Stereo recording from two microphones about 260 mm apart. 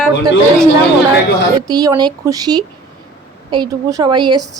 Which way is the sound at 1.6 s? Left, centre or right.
Centre.